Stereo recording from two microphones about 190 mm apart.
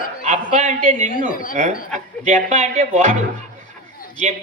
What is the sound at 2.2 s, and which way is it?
Speech, 40° right (ahead or behind).